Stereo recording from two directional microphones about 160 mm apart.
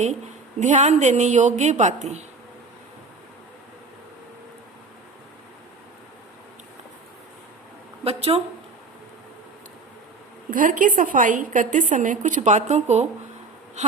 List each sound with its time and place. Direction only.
0.6 s a woman's voice: 45° right (ahead or behind)
8.0 s speech: 40° right (ahead or behind)
10.5 s a woman's voice: 55° right (ahead or behind)